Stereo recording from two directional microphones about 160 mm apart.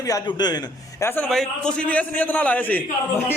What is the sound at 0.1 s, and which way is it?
Speech, 25° left (ahead or behind).